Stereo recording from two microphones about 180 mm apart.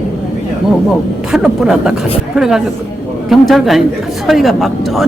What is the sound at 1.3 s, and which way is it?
Speech, 5° right (ahead or behind).